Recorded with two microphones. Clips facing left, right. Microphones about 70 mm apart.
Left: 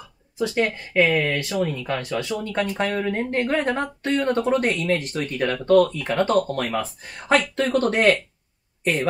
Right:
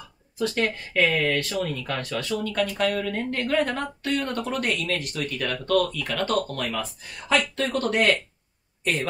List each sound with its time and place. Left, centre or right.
0.4 s speech: centre; by 7.4 s left
7.4 s speech: left
7.7 s speech: left